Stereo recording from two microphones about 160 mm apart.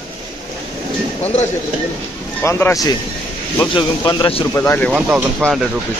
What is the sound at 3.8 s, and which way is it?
Speech, 30° left (ahead or behind).